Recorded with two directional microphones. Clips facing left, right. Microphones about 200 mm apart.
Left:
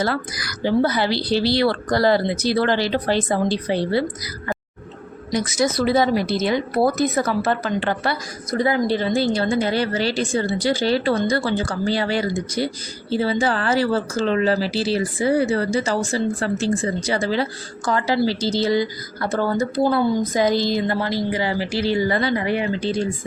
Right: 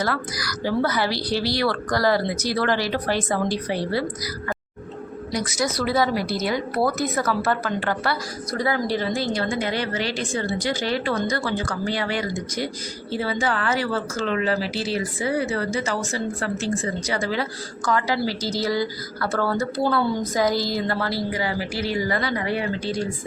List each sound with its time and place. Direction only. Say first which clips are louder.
0.0 s a woman's voice: left 3 dB; 25° left (ahead or behind)
5.3 s a woman's voice: left 5 dB; 25° left (ahead or behind)